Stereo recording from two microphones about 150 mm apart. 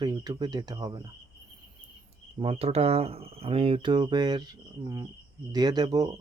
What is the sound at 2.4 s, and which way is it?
Speech, 40° right (ahead or behind).